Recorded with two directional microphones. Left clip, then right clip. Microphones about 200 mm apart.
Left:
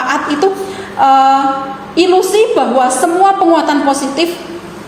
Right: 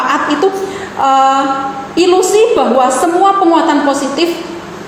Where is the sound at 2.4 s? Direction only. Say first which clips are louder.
Right 1 dB; 30° left (ahead or behind).